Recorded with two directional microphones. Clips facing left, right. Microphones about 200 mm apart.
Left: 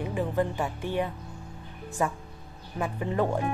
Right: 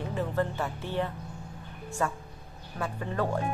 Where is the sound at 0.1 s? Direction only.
15° left (ahead or behind).